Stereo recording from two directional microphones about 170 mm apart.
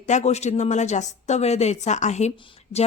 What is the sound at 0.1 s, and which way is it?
A woman's voice, 40° left (ahead or behind).